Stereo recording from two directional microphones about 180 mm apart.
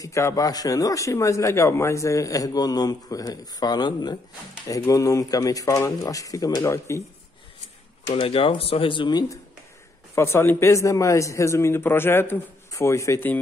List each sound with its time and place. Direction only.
0.0 s a man's voice: 15° left (ahead or behind)
8.1 s a man's voice: 30° left (ahead or behind); by 13.4 s 15° left (ahead or behind)